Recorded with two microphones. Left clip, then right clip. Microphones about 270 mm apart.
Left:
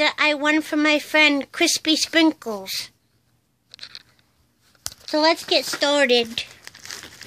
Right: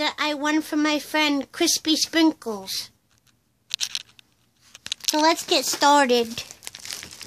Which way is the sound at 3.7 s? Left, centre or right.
Right.